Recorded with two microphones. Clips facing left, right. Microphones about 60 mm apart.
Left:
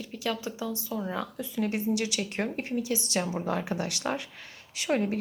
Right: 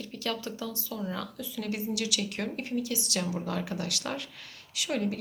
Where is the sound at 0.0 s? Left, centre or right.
Centre.